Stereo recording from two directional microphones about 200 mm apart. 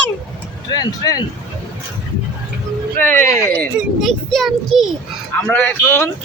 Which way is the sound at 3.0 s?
10° left (ahead or behind).